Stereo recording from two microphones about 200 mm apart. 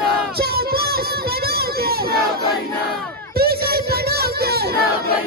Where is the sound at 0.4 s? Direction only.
50° right (ahead or behind).